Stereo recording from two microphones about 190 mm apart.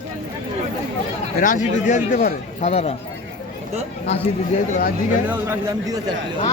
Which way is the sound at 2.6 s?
35° left (ahead or behind).